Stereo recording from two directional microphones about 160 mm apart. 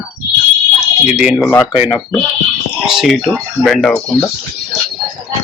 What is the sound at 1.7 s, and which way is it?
Speech, 35° left (ahead or behind).